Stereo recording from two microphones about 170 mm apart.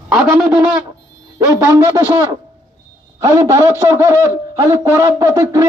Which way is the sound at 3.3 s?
15° right (ahead or behind).